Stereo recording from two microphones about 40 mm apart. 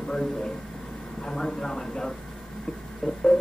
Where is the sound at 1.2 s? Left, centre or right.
Centre.